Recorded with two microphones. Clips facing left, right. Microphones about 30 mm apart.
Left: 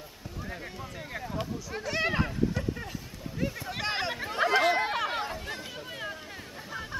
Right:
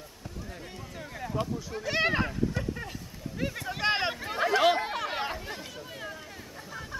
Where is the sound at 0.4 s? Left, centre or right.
Left.